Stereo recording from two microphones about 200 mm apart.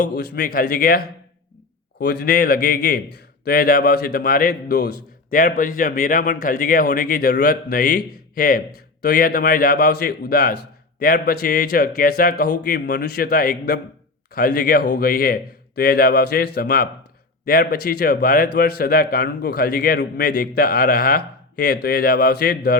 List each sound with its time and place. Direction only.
0.0 s a man's voice: 50° left (ahead or behind)